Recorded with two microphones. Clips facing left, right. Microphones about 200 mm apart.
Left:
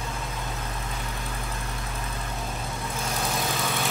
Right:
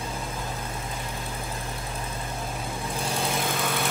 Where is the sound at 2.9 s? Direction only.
30° right (ahead or behind).